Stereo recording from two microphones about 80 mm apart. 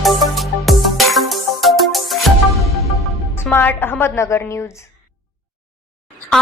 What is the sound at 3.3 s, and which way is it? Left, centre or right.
A woman's voice, left.